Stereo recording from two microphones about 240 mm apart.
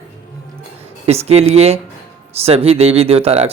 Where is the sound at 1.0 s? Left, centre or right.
Right.